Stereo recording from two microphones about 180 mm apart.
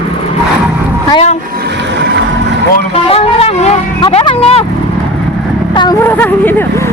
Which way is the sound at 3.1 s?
35° left (ahead or behind).